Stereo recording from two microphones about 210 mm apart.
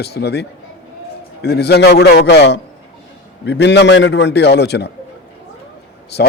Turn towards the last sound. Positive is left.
turn(degrees=50)  # may be behind; listen again after turning